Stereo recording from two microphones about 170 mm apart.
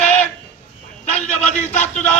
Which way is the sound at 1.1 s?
40° left (ahead or behind).